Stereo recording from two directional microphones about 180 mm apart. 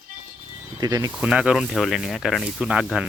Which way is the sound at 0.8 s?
20° right (ahead or behind).